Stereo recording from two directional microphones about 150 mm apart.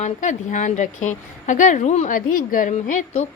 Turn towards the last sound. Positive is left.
turn(degrees=50)  # may be behind; listen again after turning